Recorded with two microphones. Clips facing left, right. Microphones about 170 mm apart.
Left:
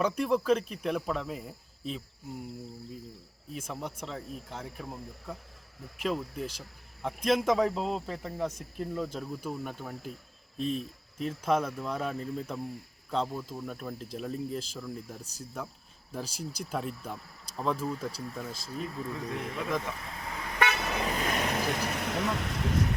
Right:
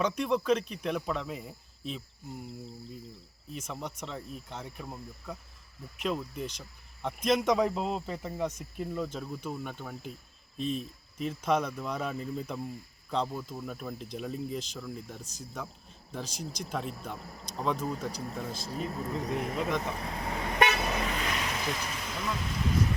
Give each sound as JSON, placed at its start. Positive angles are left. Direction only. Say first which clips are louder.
{"t": 0.0, "sound": "speech", "louder": "left 1 dB", "side_deg": 5}
{"t": 3.5, "sound": "speech", "louder": "left 1 dB", "side_deg": 5}
{"t": 18.3, "sound": "speech", "louder": "right 2 dB", "side_deg": -35}
{"t": 19.8, "sound": "toot", "louder": "right 4 dB", "side_deg": -35}
{"t": 21.2, "sound": "vehicle", "louder": "left 3 dB", "side_deg": 45}